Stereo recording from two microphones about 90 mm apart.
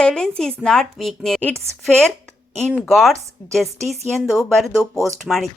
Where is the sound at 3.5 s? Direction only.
Centre (ahead or behind).